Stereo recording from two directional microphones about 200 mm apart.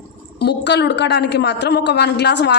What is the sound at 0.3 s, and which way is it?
A woman's voice, 60° left (ahead or behind).